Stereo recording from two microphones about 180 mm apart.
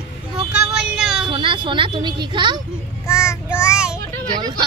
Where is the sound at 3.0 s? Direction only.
15° left (ahead or behind).